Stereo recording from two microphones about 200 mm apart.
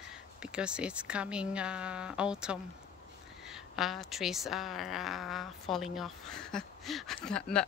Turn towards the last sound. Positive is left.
turn(degrees=5)  # may be behind; listen again after turning